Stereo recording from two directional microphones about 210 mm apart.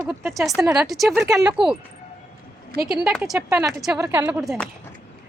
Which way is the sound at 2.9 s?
Centre (ahead or behind).